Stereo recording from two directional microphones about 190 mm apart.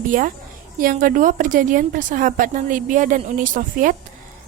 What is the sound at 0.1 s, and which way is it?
A woman's voice, 45° right (ahead or behind).